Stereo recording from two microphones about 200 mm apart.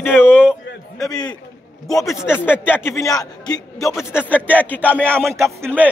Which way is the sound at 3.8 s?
Centre (ahead or behind).